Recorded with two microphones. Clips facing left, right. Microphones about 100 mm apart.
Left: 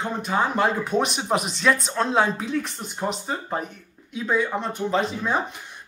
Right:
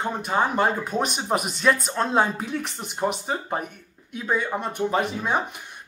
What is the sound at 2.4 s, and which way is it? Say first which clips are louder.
Speech: left 2 dB; 70° right (ahead or behind).